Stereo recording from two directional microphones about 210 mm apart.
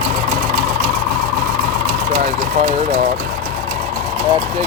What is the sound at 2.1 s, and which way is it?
Speech, 40° right (ahead or behind).